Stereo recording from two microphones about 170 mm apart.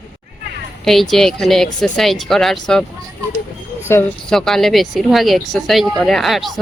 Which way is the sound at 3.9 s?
15° left (ahead or behind).